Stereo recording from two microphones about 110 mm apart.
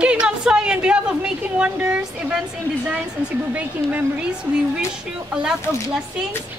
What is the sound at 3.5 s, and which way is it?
Speech, 10° right (ahead or behind).